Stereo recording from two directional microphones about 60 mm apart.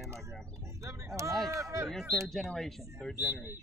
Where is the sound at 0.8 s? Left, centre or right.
Right.